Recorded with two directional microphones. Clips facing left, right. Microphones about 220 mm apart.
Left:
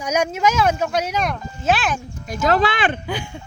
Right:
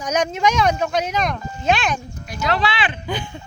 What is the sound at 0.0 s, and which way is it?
Speech, 10° left (ahead or behind).